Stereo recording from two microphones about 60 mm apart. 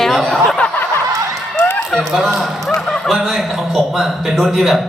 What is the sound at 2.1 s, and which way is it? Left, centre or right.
Speech, centre.